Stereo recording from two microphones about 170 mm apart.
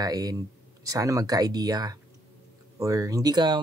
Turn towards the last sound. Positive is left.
turn(degrees=-25)  # may be behind; listen again after turning